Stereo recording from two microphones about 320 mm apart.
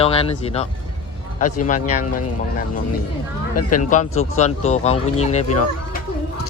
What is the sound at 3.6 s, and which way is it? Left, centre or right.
Speech, left.